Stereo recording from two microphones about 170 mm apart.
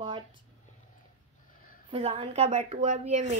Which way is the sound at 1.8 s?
35° right (ahead or behind).